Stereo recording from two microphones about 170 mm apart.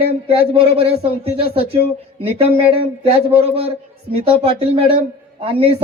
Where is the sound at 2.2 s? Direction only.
35° right (ahead or behind).